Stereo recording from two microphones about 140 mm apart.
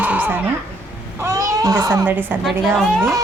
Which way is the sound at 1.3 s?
25° right (ahead or behind).